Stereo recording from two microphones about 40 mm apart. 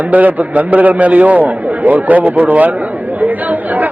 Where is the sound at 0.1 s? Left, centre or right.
Right.